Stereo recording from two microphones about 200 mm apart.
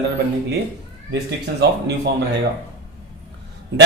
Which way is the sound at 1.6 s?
55° right (ahead or behind).